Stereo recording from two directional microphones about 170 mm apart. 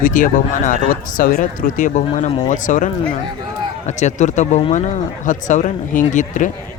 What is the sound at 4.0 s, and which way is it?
Speech, 45° left (ahead or behind).